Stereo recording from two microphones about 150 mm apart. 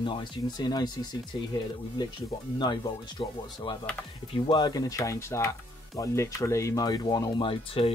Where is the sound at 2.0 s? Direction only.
30° left (ahead or behind).